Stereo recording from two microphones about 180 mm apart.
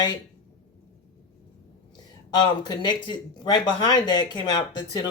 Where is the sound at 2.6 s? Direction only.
25° left (ahead or behind).